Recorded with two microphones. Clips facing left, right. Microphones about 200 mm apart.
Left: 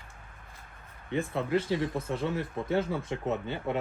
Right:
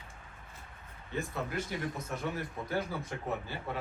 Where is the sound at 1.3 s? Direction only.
30° left (ahead or behind).